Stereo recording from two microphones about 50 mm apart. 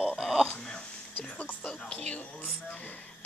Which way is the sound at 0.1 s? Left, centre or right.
Centre.